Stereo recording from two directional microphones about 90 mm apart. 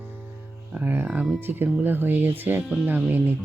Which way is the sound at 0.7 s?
15° right (ahead or behind).